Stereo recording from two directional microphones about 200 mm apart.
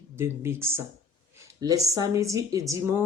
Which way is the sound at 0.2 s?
10° right (ahead or behind).